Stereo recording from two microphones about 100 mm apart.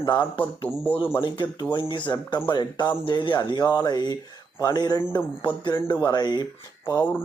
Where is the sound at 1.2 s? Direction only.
50° left (ahead or behind).